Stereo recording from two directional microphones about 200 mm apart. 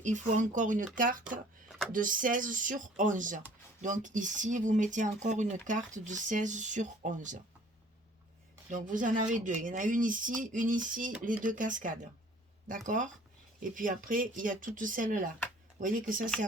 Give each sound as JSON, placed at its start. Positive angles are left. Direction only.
{"t": 0.0, "sound": "speech", "side_deg": -40}
{"t": 8.7, "sound": "speech", "side_deg": -40}
{"t": 13.6, "sound": "speech", "side_deg": -40}